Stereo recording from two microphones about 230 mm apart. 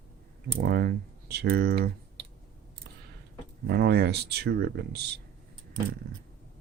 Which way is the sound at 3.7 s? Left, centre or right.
Right.